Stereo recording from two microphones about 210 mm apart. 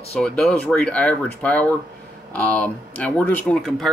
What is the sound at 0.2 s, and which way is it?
Speech, 5° left (ahead or behind).